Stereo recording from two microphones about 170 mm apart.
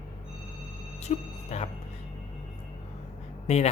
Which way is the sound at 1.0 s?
40° left (ahead or behind).